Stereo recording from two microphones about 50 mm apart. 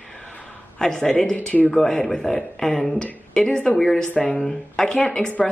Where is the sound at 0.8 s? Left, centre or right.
Centre.